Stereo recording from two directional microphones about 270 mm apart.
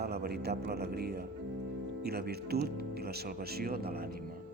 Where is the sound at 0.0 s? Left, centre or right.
Right.